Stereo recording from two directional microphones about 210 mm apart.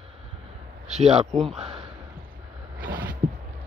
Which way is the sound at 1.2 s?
Centre (ahead or behind).